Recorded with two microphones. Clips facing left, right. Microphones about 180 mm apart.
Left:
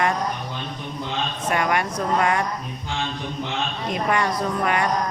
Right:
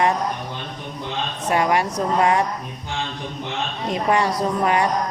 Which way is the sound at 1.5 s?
30° right (ahead or behind).